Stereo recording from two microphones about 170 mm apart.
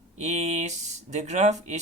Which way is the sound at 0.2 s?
45° right (ahead or behind).